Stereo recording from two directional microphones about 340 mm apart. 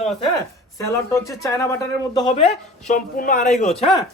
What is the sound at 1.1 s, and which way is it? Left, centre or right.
Speech, centre.